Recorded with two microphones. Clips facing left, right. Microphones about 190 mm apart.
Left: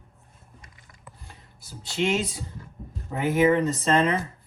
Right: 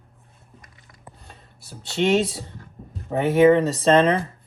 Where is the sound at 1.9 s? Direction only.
30° right (ahead or behind).